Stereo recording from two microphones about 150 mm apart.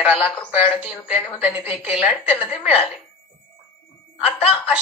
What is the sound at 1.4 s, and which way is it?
Speech, 10° right (ahead or behind).